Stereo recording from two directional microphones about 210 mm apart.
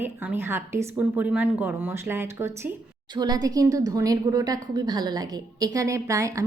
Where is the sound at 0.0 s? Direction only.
10° right (ahead or behind).